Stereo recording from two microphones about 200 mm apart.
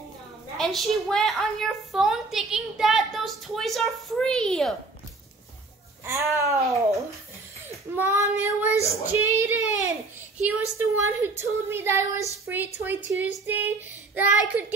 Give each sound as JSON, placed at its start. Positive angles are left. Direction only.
{"t": 0.6, "sound": "a woman's voice", "side_deg": 0}
{"t": 6.3, "sound": "a woman's voice", "side_deg": -15}